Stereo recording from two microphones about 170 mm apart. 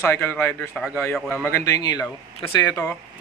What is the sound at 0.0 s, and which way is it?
A man's voice, 15° left (ahead or behind).